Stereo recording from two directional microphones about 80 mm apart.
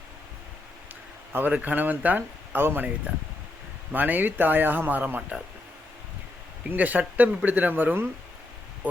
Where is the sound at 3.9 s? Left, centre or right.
Right.